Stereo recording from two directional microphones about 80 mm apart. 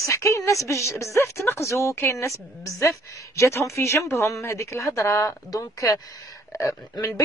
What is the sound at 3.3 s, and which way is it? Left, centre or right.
Speech, left.